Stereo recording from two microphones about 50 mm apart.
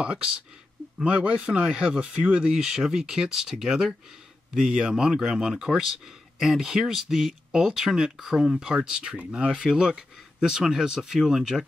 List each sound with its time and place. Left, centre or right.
0.0 s speech: centre